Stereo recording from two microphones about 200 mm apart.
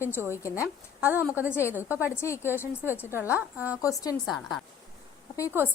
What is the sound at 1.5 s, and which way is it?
Speech, 15° left (ahead or behind).